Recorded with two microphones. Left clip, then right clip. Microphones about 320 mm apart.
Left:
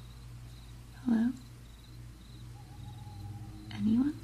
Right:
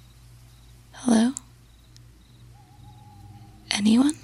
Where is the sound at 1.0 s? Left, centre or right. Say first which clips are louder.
Right 10 dB; right.